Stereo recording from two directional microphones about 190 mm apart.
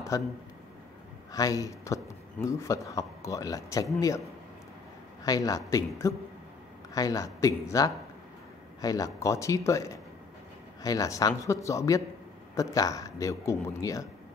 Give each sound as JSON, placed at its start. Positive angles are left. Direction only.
{"t": 0.1, "sound": "a man's voice", "side_deg": 15}
{"t": 1.3, "sound": "a man's voice", "side_deg": 20}
{"t": 5.2, "sound": "a man's voice", "side_deg": 20}